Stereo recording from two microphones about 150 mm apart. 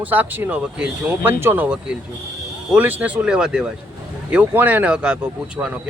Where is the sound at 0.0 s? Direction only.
10° right (ahead or behind).